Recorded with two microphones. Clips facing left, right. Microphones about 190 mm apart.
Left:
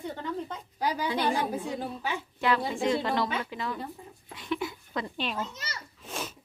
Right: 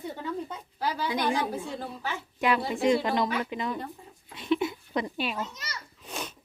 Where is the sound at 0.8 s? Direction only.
15° left (ahead or behind).